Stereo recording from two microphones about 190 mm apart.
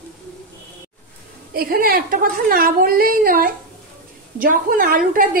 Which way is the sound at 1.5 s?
55° right (ahead or behind).